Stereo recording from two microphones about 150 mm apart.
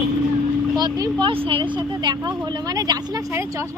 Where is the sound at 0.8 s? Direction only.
30° right (ahead or behind).